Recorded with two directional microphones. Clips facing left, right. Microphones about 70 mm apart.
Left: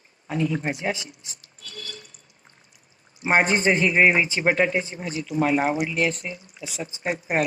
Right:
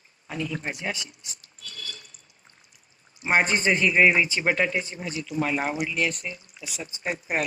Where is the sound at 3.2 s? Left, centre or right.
Left.